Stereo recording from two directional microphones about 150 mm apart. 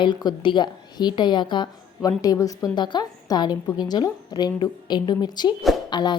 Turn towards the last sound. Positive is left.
turn(degrees=30)  # may be behind; listen again after turning